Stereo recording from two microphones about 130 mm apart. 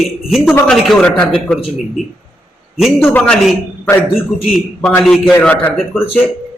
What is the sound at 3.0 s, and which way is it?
Speech, 10° left (ahead or behind).